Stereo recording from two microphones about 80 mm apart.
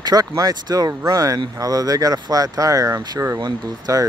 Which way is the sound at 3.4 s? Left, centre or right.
Right.